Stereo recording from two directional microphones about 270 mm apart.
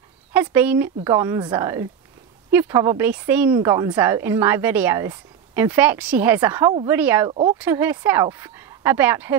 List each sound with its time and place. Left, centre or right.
0.3 s a woman's voice: centre
7.2 s speech: centre
7.5 s a woman's voice: centre